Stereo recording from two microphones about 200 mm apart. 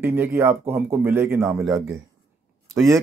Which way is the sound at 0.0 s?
10° right (ahead or behind).